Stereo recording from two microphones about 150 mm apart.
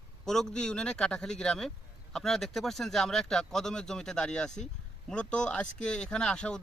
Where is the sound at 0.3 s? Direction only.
5° left (ahead or behind).